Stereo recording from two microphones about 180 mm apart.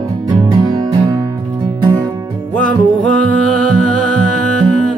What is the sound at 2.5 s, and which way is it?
Music, 5° left (ahead or behind).